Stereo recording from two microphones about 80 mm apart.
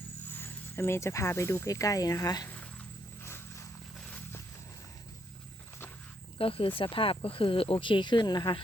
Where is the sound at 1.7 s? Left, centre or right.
Left.